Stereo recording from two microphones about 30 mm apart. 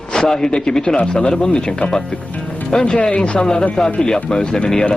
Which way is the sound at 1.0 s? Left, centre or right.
Left.